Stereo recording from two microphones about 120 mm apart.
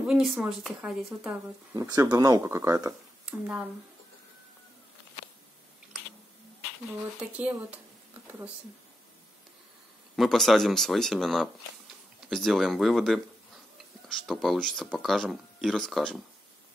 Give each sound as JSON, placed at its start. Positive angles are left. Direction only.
{"t": 0.0, "sound": "speech", "side_deg": -5}
{"t": 1.7, "sound": "speech", "side_deg": -30}
{"t": 2.4, "sound": "speech", "side_deg": -20}
{"t": 3.3, "sound": "speech", "side_deg": -10}
{"t": 7.2, "sound": "speech", "side_deg": -10}
{"t": 10.1, "sound": "speech", "side_deg": 0}